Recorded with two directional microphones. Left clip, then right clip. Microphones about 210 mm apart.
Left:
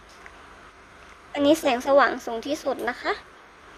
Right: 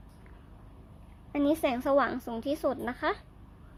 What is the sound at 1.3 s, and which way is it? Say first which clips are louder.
A woman's voice: left 7 dB; 5° left (ahead or behind).